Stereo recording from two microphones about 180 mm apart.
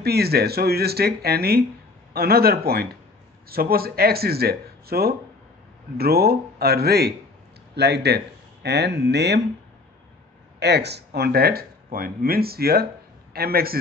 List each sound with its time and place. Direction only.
0.0 s speech: 60° right (ahead or behind)
10.6 s a man's voice: 70° right (ahead or behind)